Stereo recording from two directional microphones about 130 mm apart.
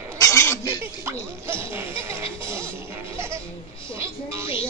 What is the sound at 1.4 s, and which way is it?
Music, 20° right (ahead or behind).